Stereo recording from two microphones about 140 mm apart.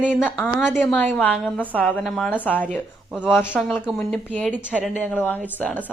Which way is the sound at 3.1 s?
5° right (ahead or behind).